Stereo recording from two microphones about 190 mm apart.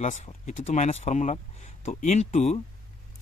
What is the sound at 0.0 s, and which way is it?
Speech, 35° left (ahead or behind).